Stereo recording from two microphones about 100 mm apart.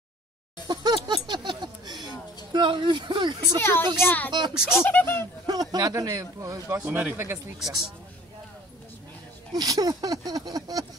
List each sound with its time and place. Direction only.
0.7 s a sound: 45° right (ahead or behind)
2.5 s speech: 55° right (ahead or behind)
4.0 s speech: 15° left (ahead or behind)
5.5 s a man's voice: 40° right (ahead or behind)
6.9 s speech: 15° right (ahead or behind)
7.6 s speech: 5° right (ahead or behind)
9.5 s a man's voice: 40° right (ahead or behind)